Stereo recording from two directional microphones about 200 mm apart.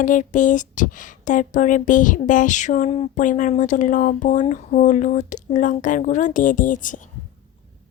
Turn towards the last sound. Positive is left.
turn(degrees=40)  # may be behind; listen again after turning